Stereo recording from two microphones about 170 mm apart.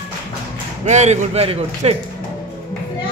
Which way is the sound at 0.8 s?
40° right (ahead or behind).